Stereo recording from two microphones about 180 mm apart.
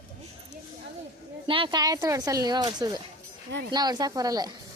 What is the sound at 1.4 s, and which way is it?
A woman's voice, 30° right (ahead or behind).